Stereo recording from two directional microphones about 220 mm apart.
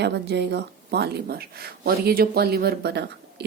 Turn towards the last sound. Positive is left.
turn(degrees=-50)  # may be behind; listen again after turning